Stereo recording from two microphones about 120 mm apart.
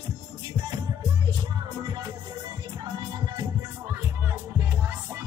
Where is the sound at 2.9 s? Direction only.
35° right (ahead or behind).